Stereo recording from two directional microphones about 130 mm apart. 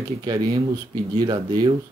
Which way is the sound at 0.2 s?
30° right (ahead or behind).